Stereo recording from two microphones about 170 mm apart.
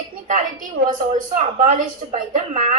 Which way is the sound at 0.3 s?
50° right (ahead or behind).